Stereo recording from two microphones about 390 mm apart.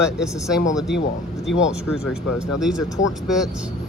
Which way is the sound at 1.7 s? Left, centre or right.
Centre.